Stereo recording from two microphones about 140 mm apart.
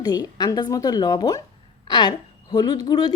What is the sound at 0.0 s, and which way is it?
A woman's voice, 25° left (ahead or behind).